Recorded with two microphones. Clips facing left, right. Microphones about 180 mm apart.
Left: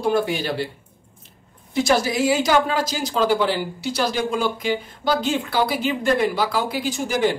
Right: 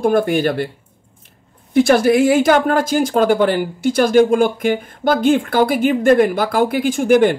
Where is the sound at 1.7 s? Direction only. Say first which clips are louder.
Right 8 dB; 55° right (ahead or behind).